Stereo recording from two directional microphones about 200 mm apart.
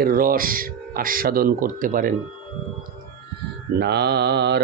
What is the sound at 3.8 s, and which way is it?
Mantra, 55° right (ahead or behind).